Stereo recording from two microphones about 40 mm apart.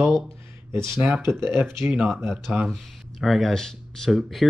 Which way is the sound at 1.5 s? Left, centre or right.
Right.